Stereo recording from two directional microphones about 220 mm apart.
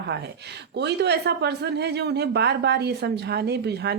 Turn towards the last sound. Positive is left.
turn(degrees=-50)  # may be behind; listen again after turning